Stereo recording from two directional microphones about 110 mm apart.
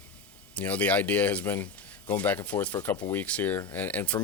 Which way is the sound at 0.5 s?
15° left (ahead or behind).